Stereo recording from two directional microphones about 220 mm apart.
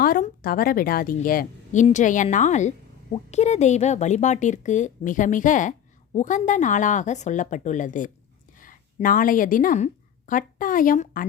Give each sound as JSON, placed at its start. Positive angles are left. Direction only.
{"t": 0.0, "sound": "a woman's voice", "side_deg": 40}